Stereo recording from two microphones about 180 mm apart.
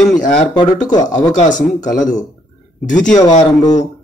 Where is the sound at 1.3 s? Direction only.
45° left (ahead or behind).